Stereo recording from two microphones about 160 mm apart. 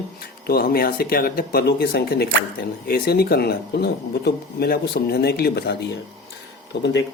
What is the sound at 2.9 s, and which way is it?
Speech, 75° left (ahead or behind).